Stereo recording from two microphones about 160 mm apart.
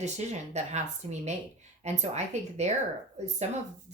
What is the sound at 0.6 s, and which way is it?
Speech, 45° right (ahead or behind).